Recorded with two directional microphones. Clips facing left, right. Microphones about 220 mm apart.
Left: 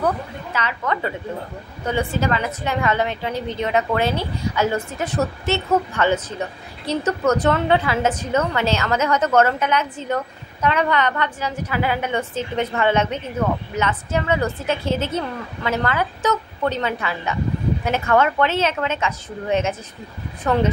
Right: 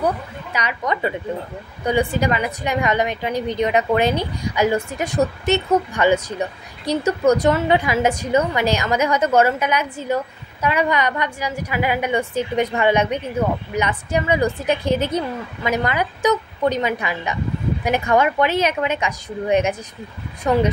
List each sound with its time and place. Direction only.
0.0 s a woman's voice: 15° right (ahead or behind)